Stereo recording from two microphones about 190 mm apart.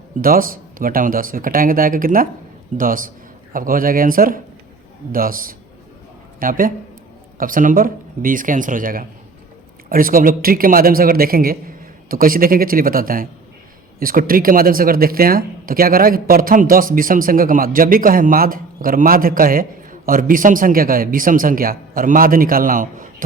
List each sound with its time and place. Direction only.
0.2 s speech: 50° right (ahead or behind)